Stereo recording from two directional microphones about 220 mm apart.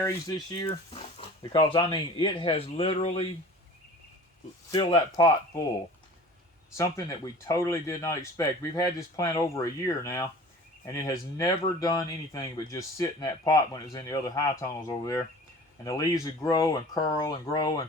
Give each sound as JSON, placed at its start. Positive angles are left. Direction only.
{"t": 0.6, "sound": "speech", "side_deg": 20}
{"t": 4.7, "sound": "speech", "side_deg": 20}
{"t": 6.7, "sound": "speech", "side_deg": 15}